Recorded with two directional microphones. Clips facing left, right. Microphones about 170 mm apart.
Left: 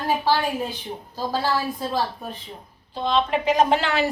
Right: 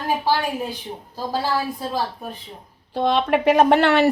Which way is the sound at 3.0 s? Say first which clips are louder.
Right 3 dB; 60° right (ahead or behind).